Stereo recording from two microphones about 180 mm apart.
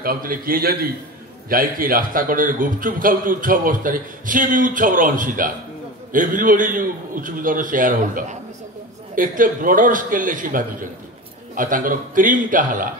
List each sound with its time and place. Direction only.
0.0 s a man's voice: 55° right (ahead or behind)